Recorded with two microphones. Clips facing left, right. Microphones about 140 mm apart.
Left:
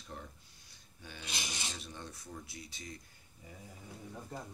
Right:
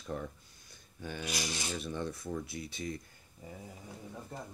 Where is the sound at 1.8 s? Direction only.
55° right (ahead or behind).